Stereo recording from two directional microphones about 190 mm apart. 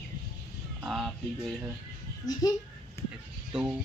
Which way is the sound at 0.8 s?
Centre (ahead or behind).